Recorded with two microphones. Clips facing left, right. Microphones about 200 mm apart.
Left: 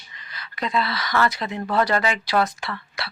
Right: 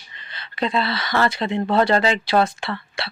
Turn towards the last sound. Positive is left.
turn(degrees=-25)  # may be behind; listen again after turning